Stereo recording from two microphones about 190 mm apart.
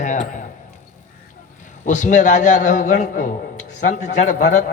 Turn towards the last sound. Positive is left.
turn(degrees=40)  # may be behind; listen again after turning